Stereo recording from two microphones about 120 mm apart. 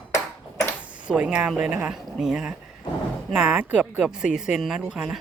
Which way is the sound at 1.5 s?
10° right (ahead or behind).